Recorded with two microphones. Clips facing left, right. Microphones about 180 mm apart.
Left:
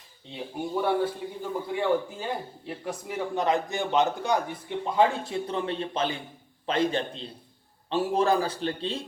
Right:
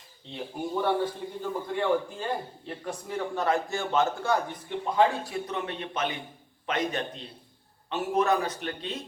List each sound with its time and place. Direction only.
0.6 s a man's voice: 5° left (ahead or behind); by 9.0 s 30° left (ahead or behind)